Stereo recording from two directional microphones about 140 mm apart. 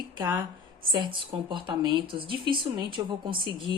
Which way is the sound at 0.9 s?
35° right (ahead or behind).